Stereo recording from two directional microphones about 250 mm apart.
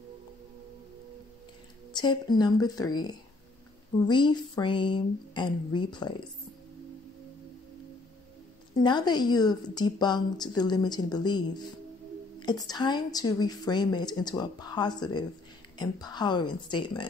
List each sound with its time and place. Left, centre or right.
2.0 s a woman's voice: centre
8.8 s a woman's voice: centre